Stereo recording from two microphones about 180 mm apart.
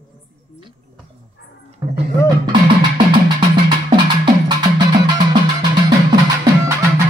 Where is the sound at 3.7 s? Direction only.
25° right (ahead or behind).